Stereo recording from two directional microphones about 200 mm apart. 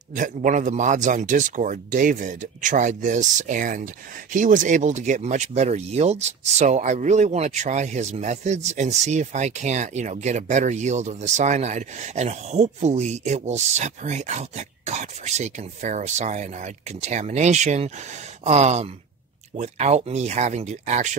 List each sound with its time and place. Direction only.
0.1 s a man's voice: 40° right (ahead or behind)